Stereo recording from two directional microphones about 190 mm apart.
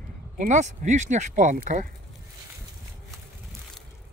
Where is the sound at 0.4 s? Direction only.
40° right (ahead or behind).